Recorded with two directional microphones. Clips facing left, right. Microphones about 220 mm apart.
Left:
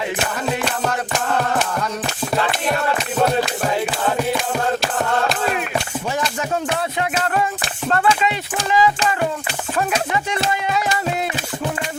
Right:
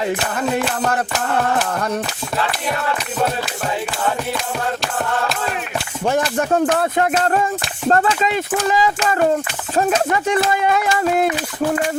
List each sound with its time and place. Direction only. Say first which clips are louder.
6.1 s music: right 8 dB; 55° right (ahead or behind)
7.9 s speech: right 2 dB; 40° right (ahead or behind)
10.2 s music: right 5 dB; 55° right (ahead or behind)